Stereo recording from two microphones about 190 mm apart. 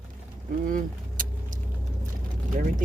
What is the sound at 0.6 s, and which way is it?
Vehicle, 45° right (ahead or behind).